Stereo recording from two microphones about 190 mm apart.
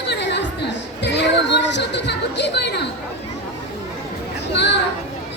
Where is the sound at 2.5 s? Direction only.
60° left (ahead or behind).